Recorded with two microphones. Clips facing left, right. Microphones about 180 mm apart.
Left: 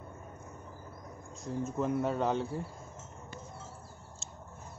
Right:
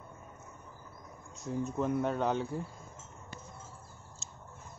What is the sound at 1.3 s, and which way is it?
Speech, centre (ahead or behind).